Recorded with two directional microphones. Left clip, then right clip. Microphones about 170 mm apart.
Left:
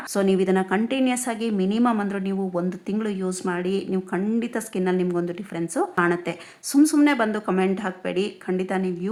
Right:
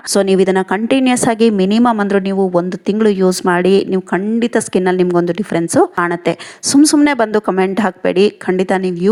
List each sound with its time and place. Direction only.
0.1 s a woman's voice: 40° right (ahead or behind)